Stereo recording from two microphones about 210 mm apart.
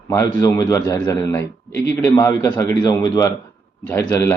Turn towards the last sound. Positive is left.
turn(degrees=10)  # may be behind; listen again after turning